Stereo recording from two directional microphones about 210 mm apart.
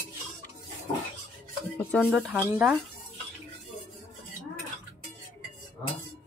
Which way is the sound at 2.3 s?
10° right (ahead or behind).